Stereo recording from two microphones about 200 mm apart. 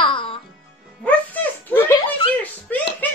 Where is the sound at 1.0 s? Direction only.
10° left (ahead or behind).